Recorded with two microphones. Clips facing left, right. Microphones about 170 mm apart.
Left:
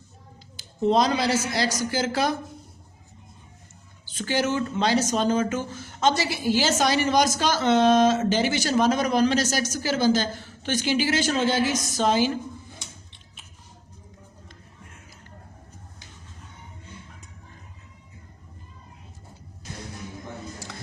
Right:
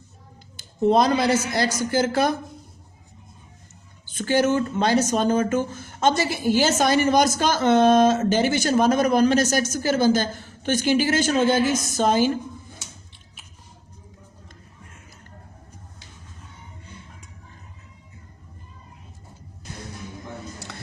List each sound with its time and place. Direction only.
0.8 s speech: 55° right (ahead or behind)
4.1 s speech: 50° right (ahead or behind)